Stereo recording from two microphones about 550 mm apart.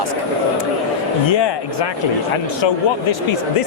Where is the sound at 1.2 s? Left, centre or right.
Left.